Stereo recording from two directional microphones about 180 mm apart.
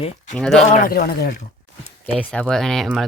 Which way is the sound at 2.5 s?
Centre (ahead or behind).